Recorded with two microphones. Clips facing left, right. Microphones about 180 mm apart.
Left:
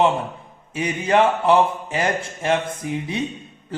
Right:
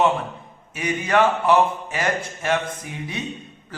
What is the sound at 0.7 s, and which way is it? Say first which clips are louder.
A man's voice: left 2 dB; 30° left (ahead or behind).